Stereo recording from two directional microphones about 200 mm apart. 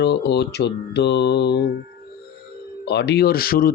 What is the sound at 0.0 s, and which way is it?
Mantra, 55° left (ahead or behind).